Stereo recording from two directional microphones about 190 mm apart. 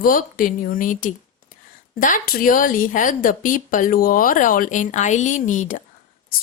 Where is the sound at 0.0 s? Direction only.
45° left (ahead or behind).